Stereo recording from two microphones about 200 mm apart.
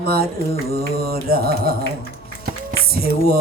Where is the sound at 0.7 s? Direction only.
50° right (ahead or behind).